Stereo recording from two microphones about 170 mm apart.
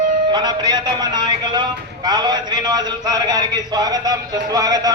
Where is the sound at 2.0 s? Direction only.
25° right (ahead or behind).